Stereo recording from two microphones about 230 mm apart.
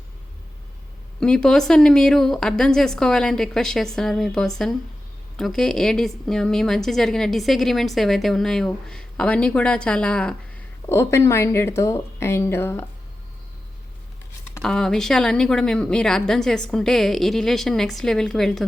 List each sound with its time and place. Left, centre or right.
1.2 s a woman's voice: centre
14.5 s a woman's voice: centre